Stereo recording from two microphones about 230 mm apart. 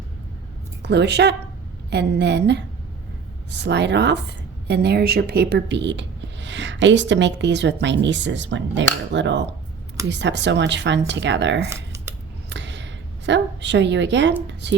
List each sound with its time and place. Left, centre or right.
0.8 s a woman's voice: right
11.7 s typing: centre
12.5 s a sound: right
14.4 s speech: right